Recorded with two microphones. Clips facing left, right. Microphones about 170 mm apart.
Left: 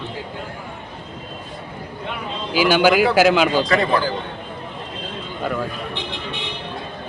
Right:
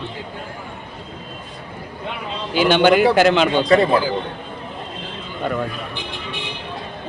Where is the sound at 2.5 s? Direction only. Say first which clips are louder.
Right 1 dB; 5° left (ahead or behind).